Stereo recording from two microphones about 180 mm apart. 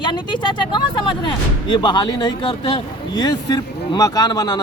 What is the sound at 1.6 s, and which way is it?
Speech, 25° left (ahead or behind).